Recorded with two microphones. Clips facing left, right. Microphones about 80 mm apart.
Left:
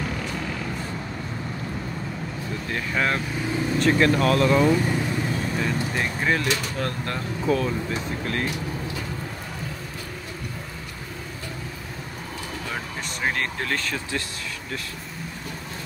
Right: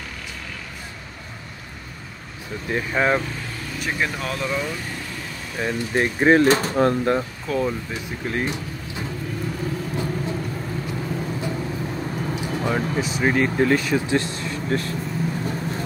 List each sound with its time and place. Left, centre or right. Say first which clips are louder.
2.7 s speech: right 5 dB; centre
3.8 s speech: left 6 dB; centre
5.6 s speech: right 8 dB; right
6.8 s speech: right 10 dB; right
13.2 s speech: right 7 dB; centre